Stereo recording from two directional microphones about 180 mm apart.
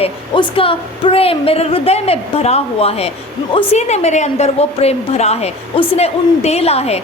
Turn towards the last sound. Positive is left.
turn(degrees=35)  # may be behind; listen again after turning